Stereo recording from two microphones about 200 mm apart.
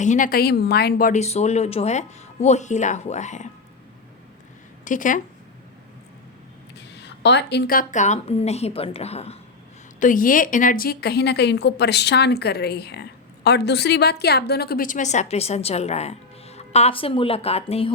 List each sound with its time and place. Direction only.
0.0 s speech: 40° left (ahead or behind)
4.9 s speech: 40° left (ahead or behind)
7.0 s speech: 60° left (ahead or behind); by 9.4 s 30° left (ahead or behind)
10.0 s a woman's voice: 40° left (ahead or behind)